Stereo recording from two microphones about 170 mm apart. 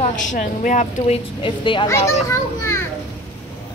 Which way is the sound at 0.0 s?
45° left (ahead or behind).